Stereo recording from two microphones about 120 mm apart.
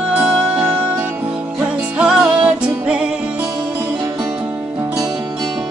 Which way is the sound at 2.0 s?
10° right (ahead or behind).